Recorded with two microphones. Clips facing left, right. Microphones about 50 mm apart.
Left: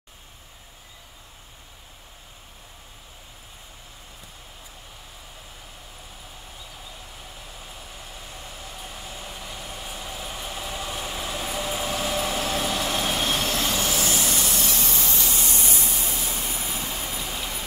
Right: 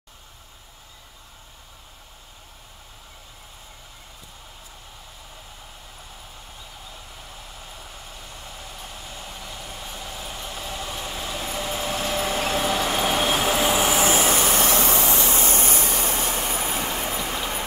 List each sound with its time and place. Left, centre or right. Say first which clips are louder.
7.6 s hair dryer: even; centre; by 14.7 s right
14.7 s vehicle: right 6 dB; right